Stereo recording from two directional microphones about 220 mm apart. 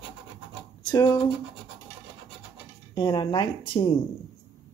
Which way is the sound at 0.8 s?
20° left (ahead or behind).